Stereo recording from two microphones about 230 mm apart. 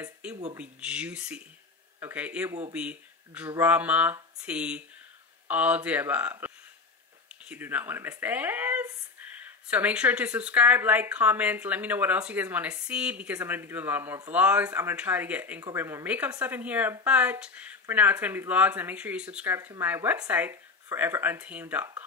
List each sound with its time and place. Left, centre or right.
0.0 s speech: centre